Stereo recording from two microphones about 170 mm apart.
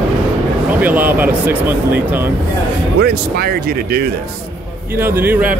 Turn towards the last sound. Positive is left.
turn(degrees=-10)  # may be behind; listen again after turning